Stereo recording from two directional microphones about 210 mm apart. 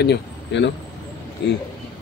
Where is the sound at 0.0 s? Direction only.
55° left (ahead or behind).